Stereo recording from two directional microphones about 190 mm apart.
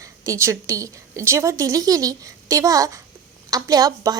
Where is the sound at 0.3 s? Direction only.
15° right (ahead or behind).